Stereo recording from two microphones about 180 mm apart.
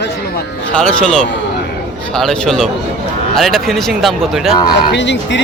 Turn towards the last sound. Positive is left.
turn(degrees=80)